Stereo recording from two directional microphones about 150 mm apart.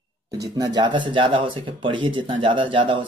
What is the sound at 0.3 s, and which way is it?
Speech, 25° right (ahead or behind).